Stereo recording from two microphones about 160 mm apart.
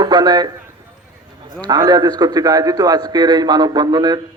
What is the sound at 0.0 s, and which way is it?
Speech, 25° right (ahead or behind).